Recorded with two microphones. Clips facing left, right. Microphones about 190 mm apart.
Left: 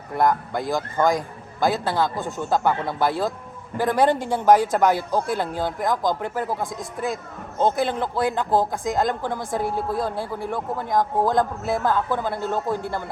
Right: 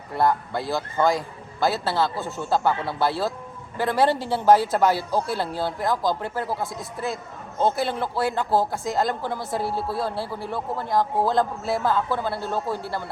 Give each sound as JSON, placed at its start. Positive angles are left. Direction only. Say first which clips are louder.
{"t": 0.1, "sound": "a woman's voice", "louder": "left 1 dB", "side_deg": 15}